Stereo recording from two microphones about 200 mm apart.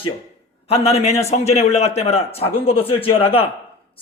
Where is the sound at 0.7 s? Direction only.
30° left (ahead or behind).